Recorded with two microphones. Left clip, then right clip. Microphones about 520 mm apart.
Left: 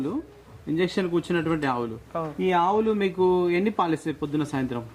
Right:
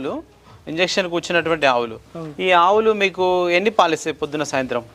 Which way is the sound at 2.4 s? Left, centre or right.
Right.